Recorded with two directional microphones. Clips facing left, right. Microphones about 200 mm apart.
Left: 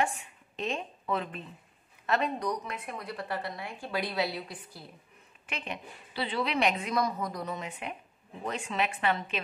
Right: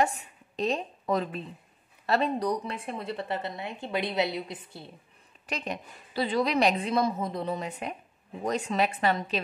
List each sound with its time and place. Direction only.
0.0 s a woman's voice: 40° right (ahead or behind); by 4.9 s 25° right (ahead or behind)
5.5 s a woman's voice: 40° right (ahead or behind)